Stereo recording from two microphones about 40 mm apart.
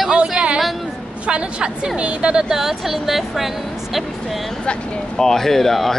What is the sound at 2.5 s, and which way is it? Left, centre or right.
Speech, centre.